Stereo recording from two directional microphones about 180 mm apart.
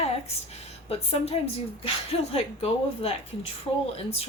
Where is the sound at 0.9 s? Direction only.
35° left (ahead or behind).